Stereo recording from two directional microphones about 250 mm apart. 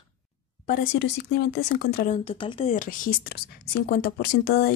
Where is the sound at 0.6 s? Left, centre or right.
Left.